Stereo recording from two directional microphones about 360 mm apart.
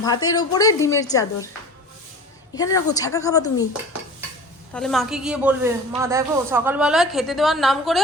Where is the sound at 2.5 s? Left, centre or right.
Centre.